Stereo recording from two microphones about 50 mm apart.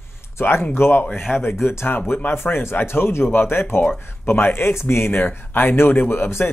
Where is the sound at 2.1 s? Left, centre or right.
Left.